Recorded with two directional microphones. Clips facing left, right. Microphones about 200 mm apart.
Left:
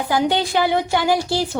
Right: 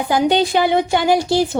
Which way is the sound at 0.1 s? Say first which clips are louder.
Right 4 dB; 20° right (ahead or behind).